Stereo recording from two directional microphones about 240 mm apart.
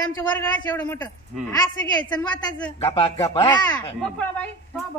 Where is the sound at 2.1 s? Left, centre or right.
Centre.